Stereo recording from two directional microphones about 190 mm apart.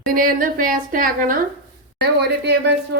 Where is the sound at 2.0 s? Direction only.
60° right (ahead or behind).